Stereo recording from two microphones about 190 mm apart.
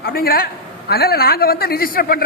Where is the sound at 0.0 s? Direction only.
50° left (ahead or behind).